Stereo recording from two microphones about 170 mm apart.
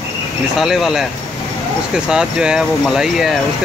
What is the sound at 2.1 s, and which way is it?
Speech, 5° right (ahead or behind).